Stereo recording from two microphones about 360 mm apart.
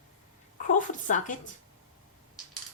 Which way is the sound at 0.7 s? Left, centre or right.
Left.